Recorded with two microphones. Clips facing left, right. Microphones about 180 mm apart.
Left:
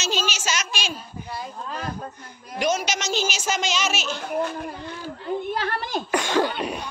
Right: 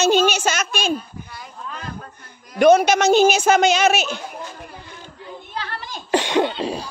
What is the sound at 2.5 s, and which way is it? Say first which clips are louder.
A woman's voice: right 11 dB; 55° right (ahead or behind).